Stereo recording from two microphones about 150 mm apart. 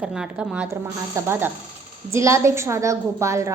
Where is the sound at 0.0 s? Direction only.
5° right (ahead or behind).